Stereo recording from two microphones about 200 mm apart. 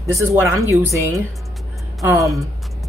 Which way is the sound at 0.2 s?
15° right (ahead or behind).